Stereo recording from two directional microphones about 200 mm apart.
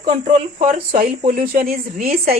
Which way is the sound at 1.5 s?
40° right (ahead or behind).